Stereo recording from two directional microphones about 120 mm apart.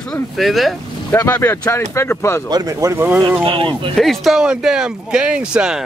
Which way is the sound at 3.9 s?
Centre (ahead or behind).